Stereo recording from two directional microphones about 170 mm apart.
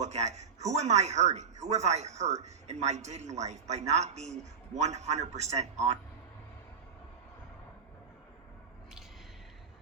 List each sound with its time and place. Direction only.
0.0 s a man's voice: 45° right (ahead or behind)